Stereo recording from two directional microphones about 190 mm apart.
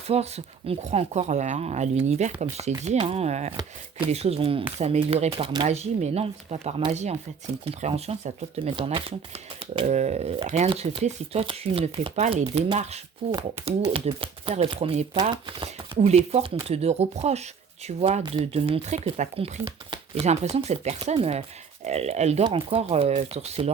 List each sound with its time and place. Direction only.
0.1 s speech: 35° right (ahead or behind)